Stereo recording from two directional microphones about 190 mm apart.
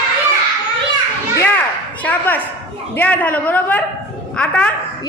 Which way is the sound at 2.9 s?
10° left (ahead or behind).